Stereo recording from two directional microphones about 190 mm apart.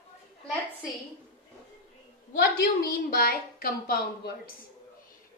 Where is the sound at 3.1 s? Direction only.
50° left (ahead or behind).